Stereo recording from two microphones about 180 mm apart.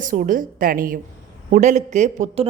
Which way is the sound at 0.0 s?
45° right (ahead or behind).